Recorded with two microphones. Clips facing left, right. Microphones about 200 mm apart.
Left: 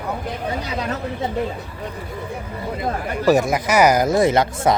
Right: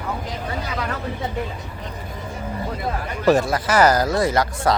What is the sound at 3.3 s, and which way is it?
Speech, 20° left (ahead or behind).